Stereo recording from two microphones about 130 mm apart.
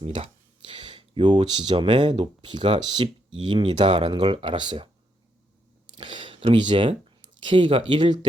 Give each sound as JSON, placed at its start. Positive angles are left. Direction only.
{"t": 0.0, "sound": "speech", "side_deg": -60}
{"t": 0.6, "sound": "speech", "side_deg": -40}
{"t": 5.9, "sound": "a sound", "side_deg": -35}
{"t": 7.4, "sound": "speech", "side_deg": -40}